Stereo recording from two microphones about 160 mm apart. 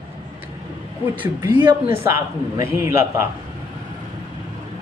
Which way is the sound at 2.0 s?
15° right (ahead or behind).